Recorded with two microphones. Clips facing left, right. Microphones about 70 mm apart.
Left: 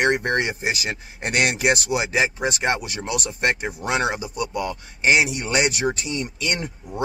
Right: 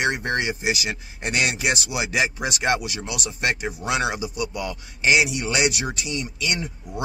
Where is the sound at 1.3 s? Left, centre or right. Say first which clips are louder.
Left 3 dB; left.